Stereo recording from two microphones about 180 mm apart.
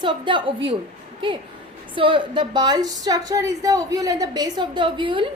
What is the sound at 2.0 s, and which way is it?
A woman's voice, 30° right (ahead or behind).